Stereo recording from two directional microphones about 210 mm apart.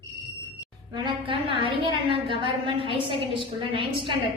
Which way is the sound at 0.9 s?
25° right (ahead or behind).